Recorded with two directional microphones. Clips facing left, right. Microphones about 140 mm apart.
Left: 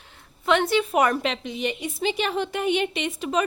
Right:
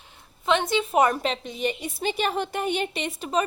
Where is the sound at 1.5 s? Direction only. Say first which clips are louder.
Even; 40° right (ahead or behind).